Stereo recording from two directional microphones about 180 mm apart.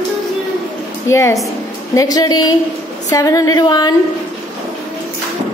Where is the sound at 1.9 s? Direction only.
20° left (ahead or behind).